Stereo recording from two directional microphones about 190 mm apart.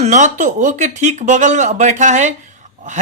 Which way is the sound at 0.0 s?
40° right (ahead or behind).